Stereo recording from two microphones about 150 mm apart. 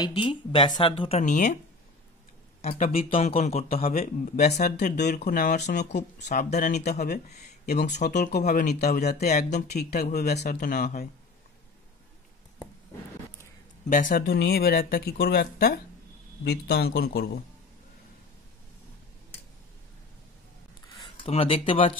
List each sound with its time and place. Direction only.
0.0 s speech: 30° left (ahead or behind)
1.2 s speech: 55° left (ahead or behind)
2.7 s speech: 70° left (ahead or behind)
3.0 s speech: 40° left (ahead or behind)
6.5 s speech: 75° left (ahead or behind)
6.9 s speech: 50° left (ahead or behind)
7.6 s speech: 90° left
7.9 s speech: 55° left (ahead or behind)
8.5 s speech: 90° left
9.2 s speech: 80° left; by 9.9 s 55° left (ahead or behind)
9.9 s speech: 90° left
10.4 s speech: 65° left (ahead or behind)
13.8 s speech: 60° left (ahead or behind); by 17.4 s 90° left
21.3 s speech: 40° left (ahead or behind)